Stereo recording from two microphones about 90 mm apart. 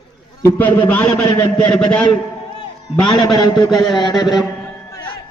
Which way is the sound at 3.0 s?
45° left (ahead or behind).